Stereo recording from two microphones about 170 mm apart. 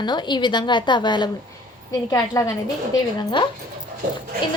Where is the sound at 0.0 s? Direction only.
25° left (ahead or behind).